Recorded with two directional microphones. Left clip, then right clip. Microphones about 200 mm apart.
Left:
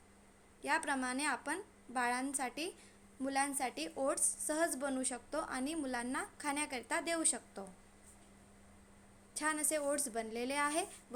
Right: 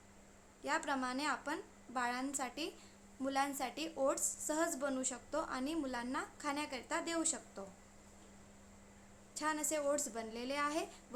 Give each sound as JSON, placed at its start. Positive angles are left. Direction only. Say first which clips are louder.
{"t": 0.6, "sound": "a woman's voice", "louder": "left 2 dB", "side_deg": 15}
{"t": 9.3, "sound": "a woman's voice", "louder": "left 1 dB", "side_deg": 15}